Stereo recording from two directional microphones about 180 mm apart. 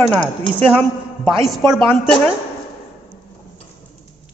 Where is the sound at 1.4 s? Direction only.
Centre (ahead or behind).